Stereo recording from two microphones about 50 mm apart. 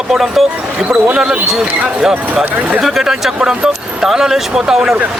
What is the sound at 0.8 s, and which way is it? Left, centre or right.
Speech, centre.